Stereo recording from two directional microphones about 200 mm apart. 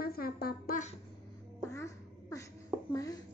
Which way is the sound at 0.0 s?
50° left (ahead or behind).